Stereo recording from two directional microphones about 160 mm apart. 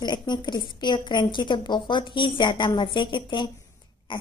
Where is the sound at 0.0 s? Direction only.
25° left (ahead or behind).